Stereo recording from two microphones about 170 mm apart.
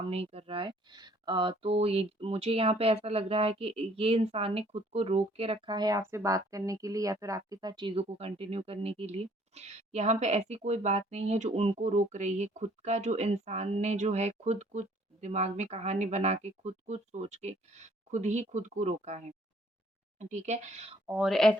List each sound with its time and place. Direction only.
0.1 s speech: 35° right (ahead or behind)
21.1 s speech: centre (ahead or behind)